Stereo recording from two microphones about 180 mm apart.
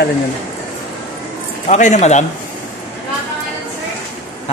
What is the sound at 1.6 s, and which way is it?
Speech, 40° left (ahead or behind).